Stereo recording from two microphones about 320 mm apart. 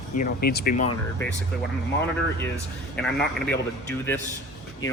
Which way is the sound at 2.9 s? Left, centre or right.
Centre.